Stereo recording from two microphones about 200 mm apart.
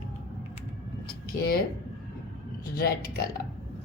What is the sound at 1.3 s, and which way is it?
Speech, 50° left (ahead or behind).